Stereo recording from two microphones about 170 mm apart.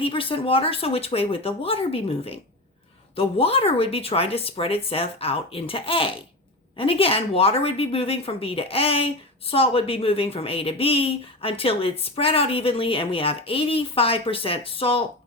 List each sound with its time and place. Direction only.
0.0 s a woman's voice: 30° left (ahead or behind)